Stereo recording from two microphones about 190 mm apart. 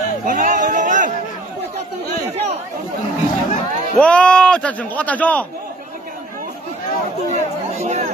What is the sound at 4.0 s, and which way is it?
A man's voice, 5° left (ahead or behind).